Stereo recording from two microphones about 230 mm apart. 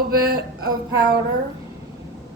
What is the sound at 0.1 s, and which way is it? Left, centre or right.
Speech, right.